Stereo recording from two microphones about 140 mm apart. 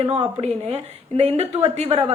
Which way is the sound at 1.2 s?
50° right (ahead or behind).